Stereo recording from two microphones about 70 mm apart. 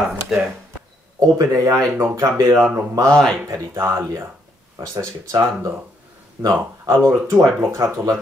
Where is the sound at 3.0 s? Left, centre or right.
Centre.